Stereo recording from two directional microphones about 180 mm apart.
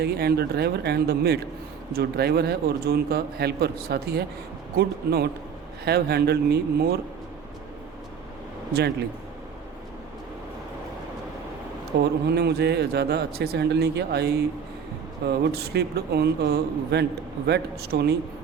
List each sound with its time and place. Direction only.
0.0 s a man's voice: 60° right (ahead or behind)
12.2 s a man's voice: 65° right (ahead or behind)